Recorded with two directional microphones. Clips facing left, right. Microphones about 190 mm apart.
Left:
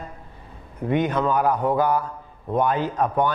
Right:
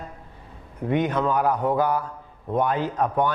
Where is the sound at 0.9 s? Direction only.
15° left (ahead or behind).